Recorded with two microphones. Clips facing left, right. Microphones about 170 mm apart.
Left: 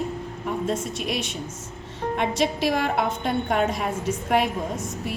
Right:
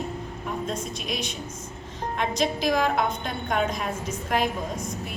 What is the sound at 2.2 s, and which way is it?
A woman's voice, 65° left (ahead or behind).